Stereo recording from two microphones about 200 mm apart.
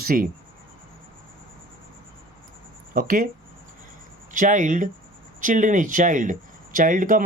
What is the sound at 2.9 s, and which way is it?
Speech, 45° right (ahead or behind).